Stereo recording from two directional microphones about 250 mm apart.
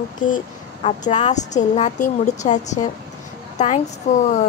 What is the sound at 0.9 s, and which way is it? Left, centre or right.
A woman's voice, left.